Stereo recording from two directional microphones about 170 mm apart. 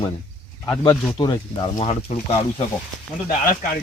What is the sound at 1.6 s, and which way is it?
Speech, 35° left (ahead or behind).